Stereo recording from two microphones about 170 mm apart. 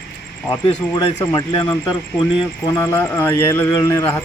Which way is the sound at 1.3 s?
30° left (ahead or behind).